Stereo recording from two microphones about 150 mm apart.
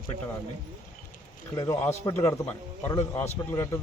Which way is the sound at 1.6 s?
20° left (ahead or behind).